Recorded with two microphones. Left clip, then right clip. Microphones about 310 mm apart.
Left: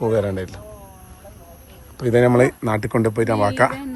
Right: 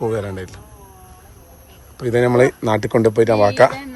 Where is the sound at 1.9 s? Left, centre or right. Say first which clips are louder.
Right 1 dB; centre.